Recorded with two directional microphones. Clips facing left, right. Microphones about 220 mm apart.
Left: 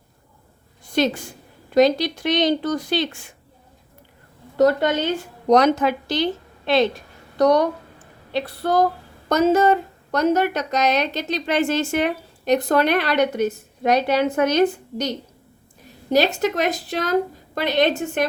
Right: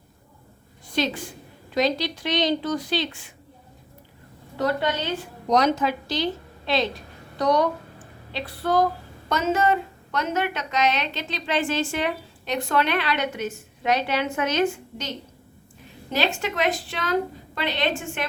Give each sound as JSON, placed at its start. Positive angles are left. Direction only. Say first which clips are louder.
{"t": 0.9, "sound": "a woman's voice", "louder": "left 5 dB", "side_deg": 50}
{"t": 4.5, "sound": "a woman's voice", "louder": "left 8 dB", "side_deg": 45}
{"t": 5.5, "sound": "a woman's voice", "louder": "left 5 dB", "side_deg": 60}
{"t": 8.3, "sound": "a woman's voice", "louder": "left 3 dB", "side_deg": 40}